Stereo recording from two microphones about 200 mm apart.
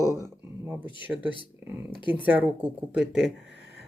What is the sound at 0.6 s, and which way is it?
Speech, 10° right (ahead or behind).